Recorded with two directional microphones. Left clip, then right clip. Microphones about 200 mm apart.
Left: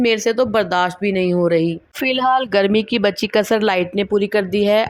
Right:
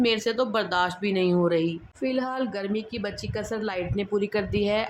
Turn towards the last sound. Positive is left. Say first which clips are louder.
# left 10 dB
turn(degrees=30)  # may be behind; listen again after turning